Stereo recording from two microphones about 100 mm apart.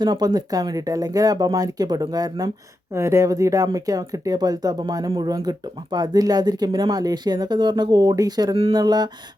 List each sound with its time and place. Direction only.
0.0 s speech: 45° right (ahead or behind)
2.9 s speech: 30° right (ahead or behind); by 9.0 s 45° right (ahead or behind)